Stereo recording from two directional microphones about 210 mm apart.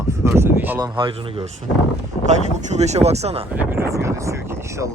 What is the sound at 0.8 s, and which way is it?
Speech, 20° right (ahead or behind).